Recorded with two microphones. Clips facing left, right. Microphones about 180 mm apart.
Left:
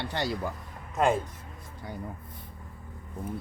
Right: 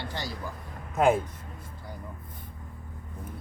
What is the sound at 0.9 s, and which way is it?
Speech, centre (ahead or behind).